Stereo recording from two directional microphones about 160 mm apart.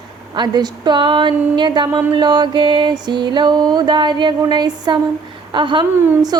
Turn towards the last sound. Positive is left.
turn(degrees=-25)  # may be behind; listen again after turning